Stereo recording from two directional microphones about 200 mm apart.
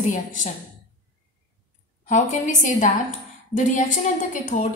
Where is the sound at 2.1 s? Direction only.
40° left (ahead or behind).